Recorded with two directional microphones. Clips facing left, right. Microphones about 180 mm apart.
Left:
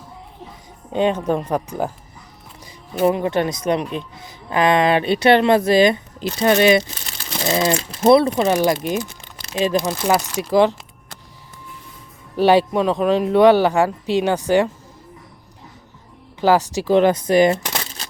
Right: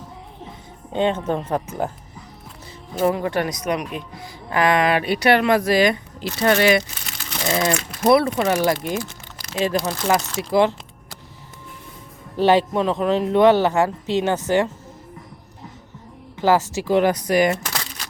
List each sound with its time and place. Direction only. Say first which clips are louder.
1.0 s speech: left 2 dB; 10° left (ahead or behind)
3.0 s speech: left 3 dB; 20° left (ahead or behind)
8.5 s speech: left 2 dB; 20° left (ahead or behind)
12.4 s speech: left 2 dB; 15° left (ahead or behind)
16.4 s speech: left 2 dB; 15° left (ahead or behind)
17.0 s speech: left 4 dB; 25° left (ahead or behind)